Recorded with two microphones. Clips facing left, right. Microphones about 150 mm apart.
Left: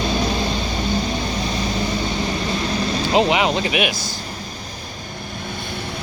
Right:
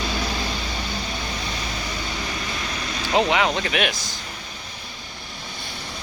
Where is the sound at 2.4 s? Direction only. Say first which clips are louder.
Left 8 dB; 30° left (ahead or behind); by 3.9 s 10° left (ahead or behind).